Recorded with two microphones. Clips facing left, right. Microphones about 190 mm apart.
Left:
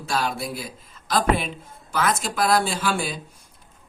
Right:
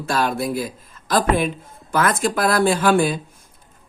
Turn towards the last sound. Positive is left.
turn(degrees=-55)  # may be behind; listen again after turning